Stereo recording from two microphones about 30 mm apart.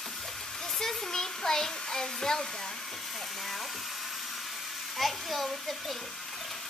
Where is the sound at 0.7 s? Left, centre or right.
Centre.